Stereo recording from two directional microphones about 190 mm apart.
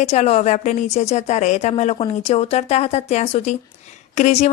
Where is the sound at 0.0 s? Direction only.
35° left (ahead or behind).